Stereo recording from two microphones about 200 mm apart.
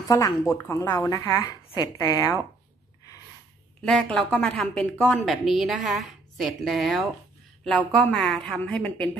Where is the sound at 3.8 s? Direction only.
5° left (ahead or behind).